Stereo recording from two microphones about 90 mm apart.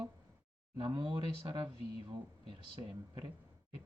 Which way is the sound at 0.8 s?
65° right (ahead or behind).